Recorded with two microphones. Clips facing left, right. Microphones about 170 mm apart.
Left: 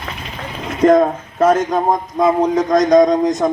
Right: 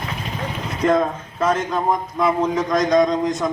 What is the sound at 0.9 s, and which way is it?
A man's voice, 40° left (ahead or behind).